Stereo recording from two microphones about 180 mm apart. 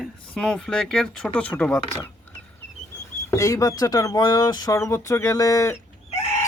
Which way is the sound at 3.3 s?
15° left (ahead or behind).